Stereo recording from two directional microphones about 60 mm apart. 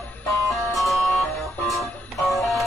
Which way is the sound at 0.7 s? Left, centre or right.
Centre.